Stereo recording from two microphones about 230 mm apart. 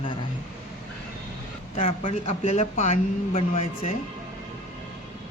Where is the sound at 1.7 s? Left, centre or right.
Left.